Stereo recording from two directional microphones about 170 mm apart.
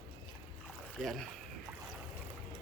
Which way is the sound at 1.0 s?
Centre (ahead or behind).